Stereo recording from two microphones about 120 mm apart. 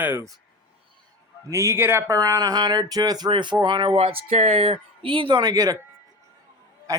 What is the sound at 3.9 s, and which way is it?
Speech, 55° right (ahead or behind).